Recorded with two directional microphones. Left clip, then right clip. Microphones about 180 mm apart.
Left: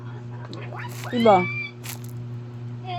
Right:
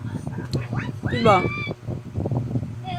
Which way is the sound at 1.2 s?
15° right (ahead or behind).